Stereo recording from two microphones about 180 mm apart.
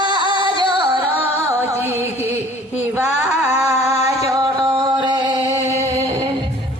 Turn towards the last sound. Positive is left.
turn(degrees=-15)  # may be behind; listen again after turning